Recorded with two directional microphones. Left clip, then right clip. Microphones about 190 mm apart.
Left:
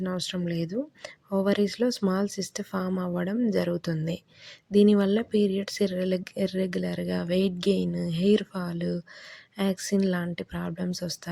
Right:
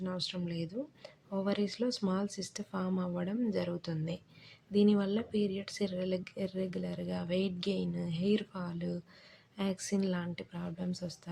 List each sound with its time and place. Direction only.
0.0 s speech: 45° left (ahead or behind)